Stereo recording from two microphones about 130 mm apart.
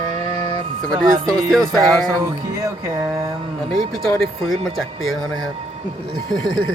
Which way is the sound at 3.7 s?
Centre (ahead or behind).